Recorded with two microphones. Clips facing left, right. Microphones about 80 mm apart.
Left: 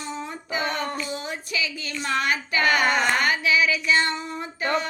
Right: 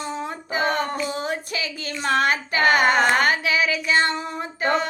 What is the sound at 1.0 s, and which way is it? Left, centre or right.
Child singing, right.